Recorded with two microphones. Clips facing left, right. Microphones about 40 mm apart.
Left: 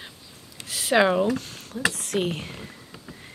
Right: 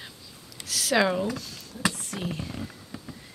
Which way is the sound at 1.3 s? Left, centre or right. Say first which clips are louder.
Left 7 dB; left.